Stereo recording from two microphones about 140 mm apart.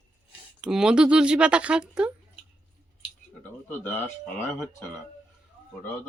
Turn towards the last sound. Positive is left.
turn(degrees=10)  # may be behind; listen again after turning